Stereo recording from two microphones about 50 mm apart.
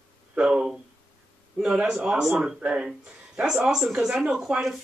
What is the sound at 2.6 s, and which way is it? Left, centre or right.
Speech, right.